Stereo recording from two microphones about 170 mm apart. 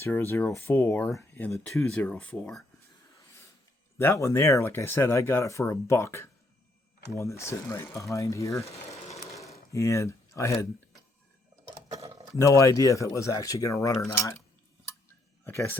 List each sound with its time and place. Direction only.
0.0 s speech: 15° left (ahead or behind)
3.9 s speech: 15° left (ahead or behind)
8.9 s a sound: 20° left (ahead or behind)
9.5 s speech: 20° left (ahead or behind)
12.4 s speech: 20° left (ahead or behind)
15.4 s speech: 10° left (ahead or behind)